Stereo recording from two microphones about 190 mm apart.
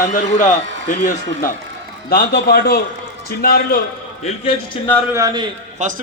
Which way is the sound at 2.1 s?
55° left (ahead or behind).